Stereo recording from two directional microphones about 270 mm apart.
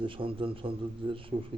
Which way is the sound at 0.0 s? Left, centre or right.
Centre.